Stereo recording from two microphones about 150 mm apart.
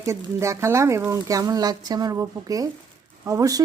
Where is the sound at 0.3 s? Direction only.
20° right (ahead or behind).